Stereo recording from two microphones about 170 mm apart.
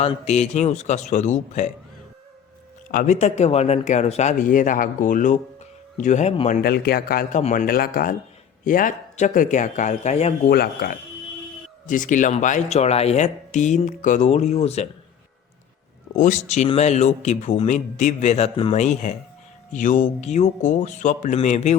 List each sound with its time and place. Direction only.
0.0 s speech: 40° left (ahead or behind)
2.9 s speech: 50° left (ahead or behind)
6.5 s a man's voice: 65° left (ahead or behind)
7.3 s speech: 50° left (ahead or behind)
10.5 s a man's voice: 65° left (ahead or behind)
11.9 s speech: 50° left (ahead or behind)
16.1 s a man's voice: 45° left (ahead or behind)